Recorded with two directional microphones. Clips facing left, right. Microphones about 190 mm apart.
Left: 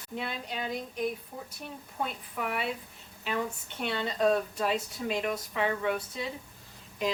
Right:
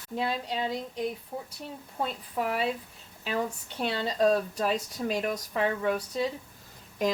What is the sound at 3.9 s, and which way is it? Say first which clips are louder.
Speech: right 2 dB; 35° right (ahead or behind).